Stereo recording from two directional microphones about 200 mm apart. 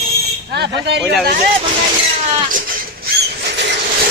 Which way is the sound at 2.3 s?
40° right (ahead or behind).